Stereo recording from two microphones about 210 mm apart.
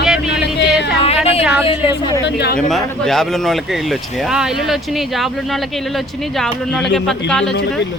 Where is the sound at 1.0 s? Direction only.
30° left (ahead or behind).